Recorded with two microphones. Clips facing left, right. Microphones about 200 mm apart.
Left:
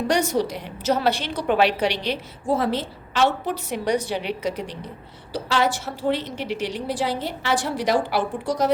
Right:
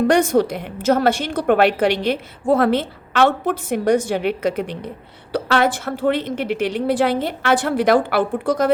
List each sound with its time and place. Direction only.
0.1 s a woman's voice: 55° right (ahead or behind)